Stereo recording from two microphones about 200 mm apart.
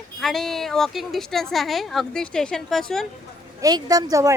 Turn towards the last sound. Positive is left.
turn(degrees=-15)  # may be behind; listen again after turning